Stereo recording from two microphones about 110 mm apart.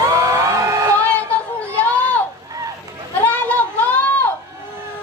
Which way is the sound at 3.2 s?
15° left (ahead or behind).